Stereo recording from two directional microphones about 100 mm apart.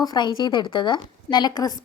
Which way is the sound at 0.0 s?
45° left (ahead or behind).